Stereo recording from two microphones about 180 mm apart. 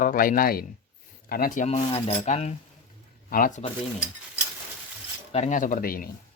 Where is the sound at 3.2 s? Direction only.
50° left (ahead or behind).